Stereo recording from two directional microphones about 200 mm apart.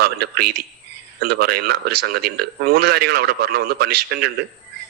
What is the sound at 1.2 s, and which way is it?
A man's voice, 50° right (ahead or behind).